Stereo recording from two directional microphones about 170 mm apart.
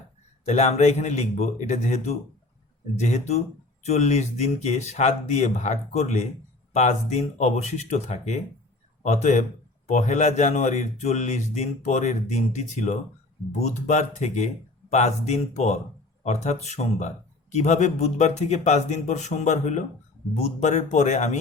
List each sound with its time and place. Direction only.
0.4 s speech: 40° left (ahead or behind)